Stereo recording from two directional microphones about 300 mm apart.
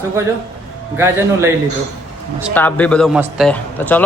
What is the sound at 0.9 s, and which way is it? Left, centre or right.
Speech, centre.